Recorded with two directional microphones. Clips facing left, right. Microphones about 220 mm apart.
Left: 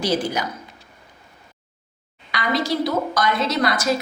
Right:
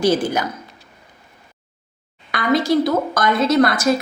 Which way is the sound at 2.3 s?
50° right (ahead or behind).